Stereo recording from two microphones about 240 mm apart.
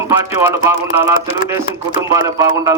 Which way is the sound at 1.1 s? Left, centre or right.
Left.